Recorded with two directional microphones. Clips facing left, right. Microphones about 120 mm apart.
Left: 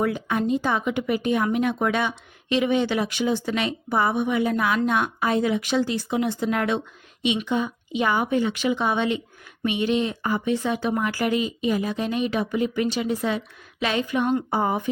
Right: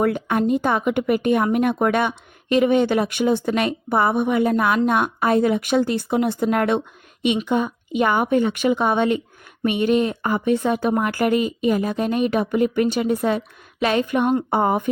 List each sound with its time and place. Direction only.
0.0 s speech: 55° right (ahead or behind)